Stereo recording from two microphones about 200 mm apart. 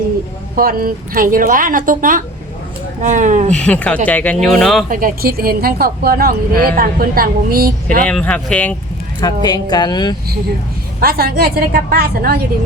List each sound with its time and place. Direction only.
0.5 s a woman's voice: 45° right (ahead or behind)
3.5 s speech: 5° left (ahead or behind)
4.9 s a woman's voice: 45° right (ahead or behind)
8.0 s speech: 5° left (ahead or behind)
9.2 s a woman's voice: 20° left (ahead or behind)
11.0 s a woman's voice: 50° right (ahead or behind)